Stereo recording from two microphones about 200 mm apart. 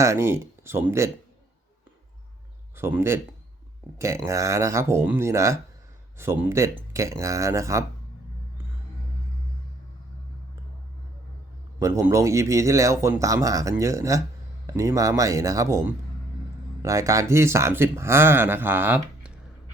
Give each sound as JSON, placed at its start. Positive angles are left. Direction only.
{"t": 0.0, "sound": "speech", "side_deg": -15}
{"t": 2.7, "sound": "speech", "side_deg": -10}
{"t": 11.8, "sound": "speech", "side_deg": -15}